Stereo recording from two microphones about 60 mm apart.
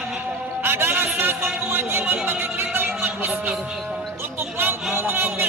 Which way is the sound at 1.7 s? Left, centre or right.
Right.